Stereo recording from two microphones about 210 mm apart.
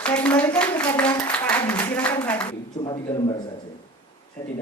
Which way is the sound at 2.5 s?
25° left (ahead or behind).